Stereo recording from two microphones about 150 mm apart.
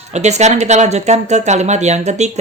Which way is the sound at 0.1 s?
50° right (ahead or behind).